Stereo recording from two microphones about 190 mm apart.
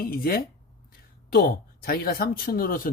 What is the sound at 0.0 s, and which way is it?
Speech, 50° left (ahead or behind).